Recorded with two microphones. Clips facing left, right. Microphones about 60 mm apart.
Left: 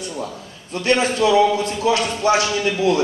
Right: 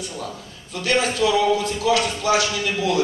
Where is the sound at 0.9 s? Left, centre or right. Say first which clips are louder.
Left 3 dB; left.